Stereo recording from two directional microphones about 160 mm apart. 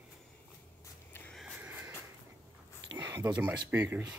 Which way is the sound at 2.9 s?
20° right (ahead or behind).